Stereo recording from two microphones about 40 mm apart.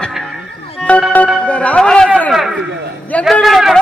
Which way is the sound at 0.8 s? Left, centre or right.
Centre.